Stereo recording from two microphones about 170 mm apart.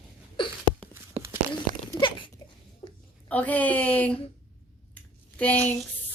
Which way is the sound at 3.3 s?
10° left (ahead or behind).